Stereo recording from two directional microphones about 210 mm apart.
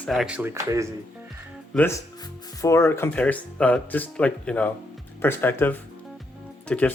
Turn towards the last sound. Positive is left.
turn(degrees=5)  # may be behind; listen again after turning